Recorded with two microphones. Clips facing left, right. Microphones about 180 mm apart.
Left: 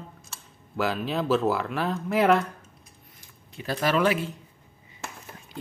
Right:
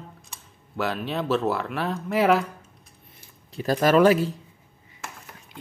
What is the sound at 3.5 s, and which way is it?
Speech, 45° right (ahead or behind).